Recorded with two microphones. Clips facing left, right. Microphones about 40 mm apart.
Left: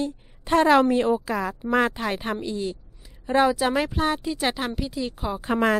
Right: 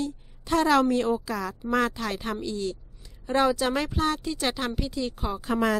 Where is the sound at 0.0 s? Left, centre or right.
Left; by 5.4 s centre.